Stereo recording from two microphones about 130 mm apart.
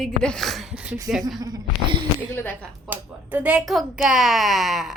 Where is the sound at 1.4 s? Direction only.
35° right (ahead or behind).